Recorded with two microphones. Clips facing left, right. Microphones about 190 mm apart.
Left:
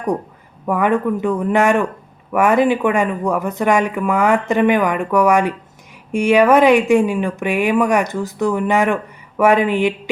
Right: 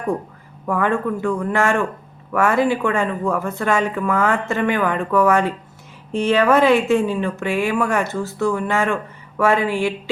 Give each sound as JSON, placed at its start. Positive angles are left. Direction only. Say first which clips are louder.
{"t": 0.7, "sound": "speech", "louder": "left 3 dB", "side_deg": 15}